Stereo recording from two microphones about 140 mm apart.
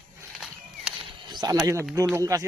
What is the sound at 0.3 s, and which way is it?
Walk, 5° right (ahead or behind).